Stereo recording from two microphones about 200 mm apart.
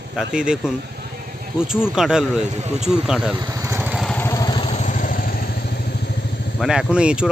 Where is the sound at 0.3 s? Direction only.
5° right (ahead or behind).